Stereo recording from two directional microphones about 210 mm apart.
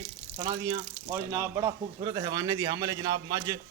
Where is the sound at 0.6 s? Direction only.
15° right (ahead or behind).